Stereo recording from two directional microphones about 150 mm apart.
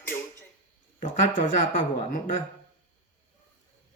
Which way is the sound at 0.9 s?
60° left (ahead or behind).